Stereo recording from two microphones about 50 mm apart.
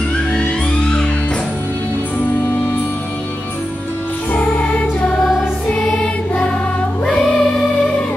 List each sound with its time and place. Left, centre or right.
0.3 s music: centre
7.2 s music: centre